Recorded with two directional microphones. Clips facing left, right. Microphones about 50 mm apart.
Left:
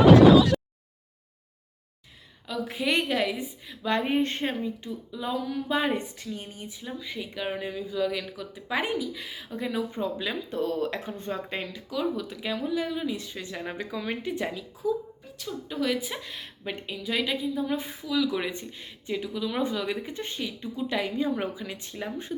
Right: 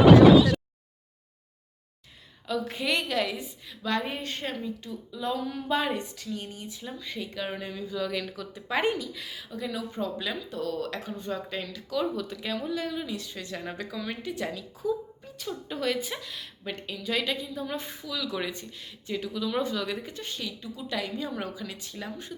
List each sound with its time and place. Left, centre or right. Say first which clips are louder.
2.5 s speech: right 1 dB; centre
2.9 s speech: left 2 dB; centre
5.5 s speech: left 2 dB; centre
5.9 s speech: left 2 dB; left; by 9.0 s centre
9.1 s speech: left 2 dB; left
10.5 s speech: left 6 dB; left
11.9 s speech: even; centre
13.1 s speech: left 1 dB; left
14.8 s a woman's voice: left 1 dB; centre
16.2 s speech: left 1 dB; left
16.6 s speech: left 1 dB; centre